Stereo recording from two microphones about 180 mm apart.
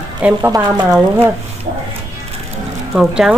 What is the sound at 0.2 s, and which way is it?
Speech, 15° right (ahead or behind).